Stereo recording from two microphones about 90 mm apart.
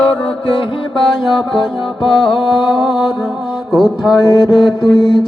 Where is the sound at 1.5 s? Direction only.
70° left (ahead or behind).